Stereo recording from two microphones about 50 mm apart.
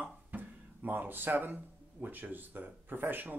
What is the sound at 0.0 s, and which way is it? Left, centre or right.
Speech, right.